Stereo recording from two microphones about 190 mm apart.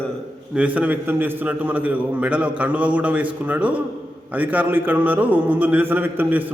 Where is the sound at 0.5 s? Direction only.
5° right (ahead or behind).